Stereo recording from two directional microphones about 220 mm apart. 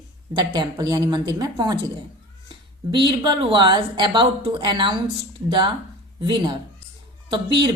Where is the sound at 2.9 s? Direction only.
20° right (ahead or behind).